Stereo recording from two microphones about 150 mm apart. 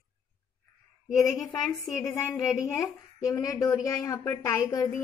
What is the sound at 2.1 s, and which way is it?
A woman's voice, 20° left (ahead or behind).